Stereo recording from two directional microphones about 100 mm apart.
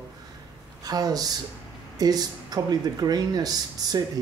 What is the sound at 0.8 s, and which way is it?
Speech, 40° right (ahead or behind).